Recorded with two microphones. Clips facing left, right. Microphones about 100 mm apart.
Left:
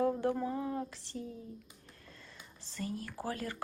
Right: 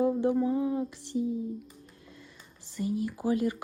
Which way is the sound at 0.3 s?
15° right (ahead or behind).